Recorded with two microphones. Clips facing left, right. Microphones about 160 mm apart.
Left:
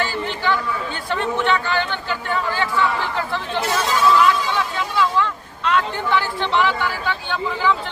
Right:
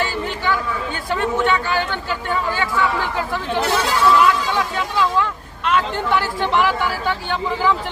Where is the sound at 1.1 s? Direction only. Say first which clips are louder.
Right 1 dB; 10° right (ahead or behind).